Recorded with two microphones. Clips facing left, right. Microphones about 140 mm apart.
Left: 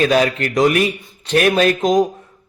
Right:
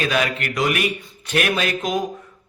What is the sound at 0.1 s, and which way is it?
Speech, 35° left (ahead or behind).